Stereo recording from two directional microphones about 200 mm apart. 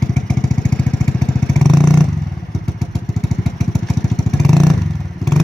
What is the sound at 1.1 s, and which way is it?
Motorcycle, centre (ahead or behind).